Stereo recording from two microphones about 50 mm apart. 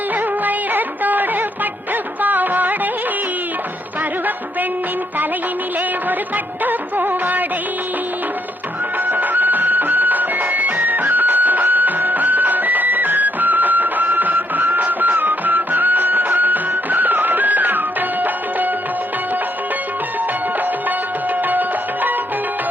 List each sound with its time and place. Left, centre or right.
0.4 s music: right
6.1 s music: right
9.0 s music: right